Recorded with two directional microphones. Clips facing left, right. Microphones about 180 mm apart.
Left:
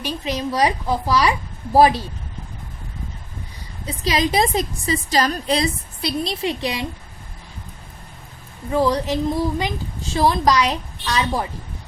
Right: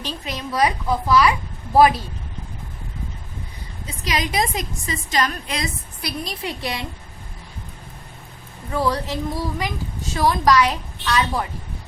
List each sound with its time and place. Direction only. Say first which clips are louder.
0.3 s a woman's voice: left 1 dB; 25° left (ahead or behind)
3.8 s a woman's voice: left 5 dB; 30° left (ahead or behind)
8.7 s a woman's voice: left 4 dB; 20° left (ahead or behind)